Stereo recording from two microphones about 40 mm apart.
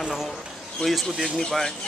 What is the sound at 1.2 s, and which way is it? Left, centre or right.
Speech, centre.